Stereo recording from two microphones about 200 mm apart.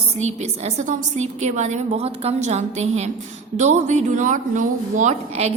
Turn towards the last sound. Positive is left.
turn(degrees=-35)  # may be behind; listen again after turning